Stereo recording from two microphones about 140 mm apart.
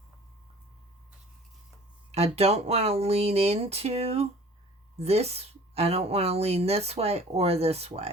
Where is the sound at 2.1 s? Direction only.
50° right (ahead or behind).